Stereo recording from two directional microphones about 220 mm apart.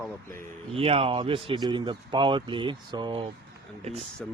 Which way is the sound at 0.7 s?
25° right (ahead or behind).